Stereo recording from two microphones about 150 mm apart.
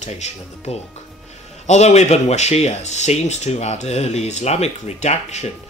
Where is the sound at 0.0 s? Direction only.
50° left (ahead or behind).